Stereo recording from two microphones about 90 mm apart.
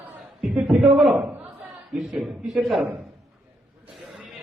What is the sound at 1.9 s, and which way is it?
A man's voice, centre (ahead or behind).